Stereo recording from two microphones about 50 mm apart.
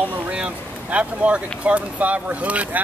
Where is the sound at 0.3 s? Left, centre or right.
Right.